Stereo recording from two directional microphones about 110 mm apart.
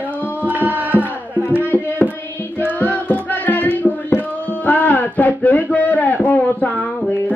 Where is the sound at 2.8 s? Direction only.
15° left (ahead or behind).